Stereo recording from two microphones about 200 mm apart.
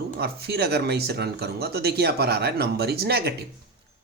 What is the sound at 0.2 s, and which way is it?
Speech, 50° right (ahead or behind).